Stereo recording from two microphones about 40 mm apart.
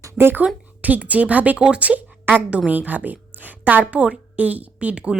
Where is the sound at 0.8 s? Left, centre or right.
Right.